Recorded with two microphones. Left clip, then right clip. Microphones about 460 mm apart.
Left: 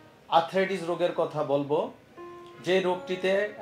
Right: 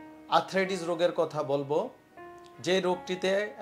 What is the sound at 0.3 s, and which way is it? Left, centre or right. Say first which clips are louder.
Speech: left 3 dB; right.